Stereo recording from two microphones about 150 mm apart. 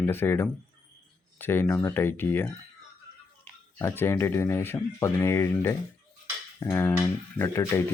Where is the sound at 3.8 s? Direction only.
15° left (ahead or behind).